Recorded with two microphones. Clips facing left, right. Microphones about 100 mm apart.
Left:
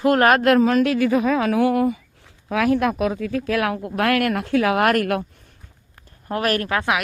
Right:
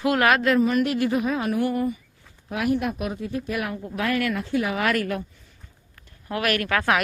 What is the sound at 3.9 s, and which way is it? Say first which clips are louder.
Speech: left 4 dB; 60° left (ahead or behind).